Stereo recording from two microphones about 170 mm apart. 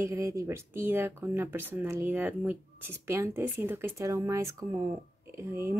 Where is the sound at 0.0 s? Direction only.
15° right (ahead or behind).